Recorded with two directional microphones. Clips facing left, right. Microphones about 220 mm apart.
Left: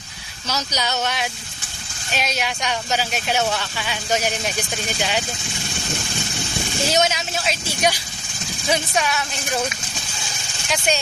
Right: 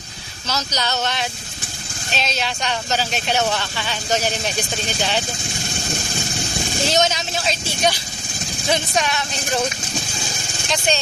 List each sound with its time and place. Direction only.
0.4 s speech: 10° left (ahead or behind)
6.9 s speech: 5° left (ahead or behind)
10.7 s speech: 10° left (ahead or behind)